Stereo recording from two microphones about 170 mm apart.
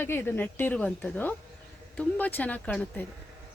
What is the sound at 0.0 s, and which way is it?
Speech, 15° left (ahead or behind).